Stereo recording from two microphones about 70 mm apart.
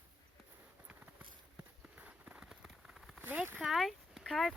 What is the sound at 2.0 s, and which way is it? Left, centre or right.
Run, centre.